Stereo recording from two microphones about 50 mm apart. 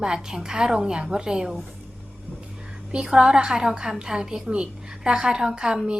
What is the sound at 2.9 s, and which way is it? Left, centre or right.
A woman's voice, centre.